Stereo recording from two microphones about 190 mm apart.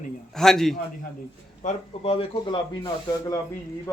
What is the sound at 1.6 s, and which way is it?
Speech, 30° left (ahead or behind).